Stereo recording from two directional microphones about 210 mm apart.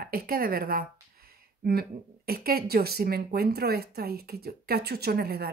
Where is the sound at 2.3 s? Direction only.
45° right (ahead or behind).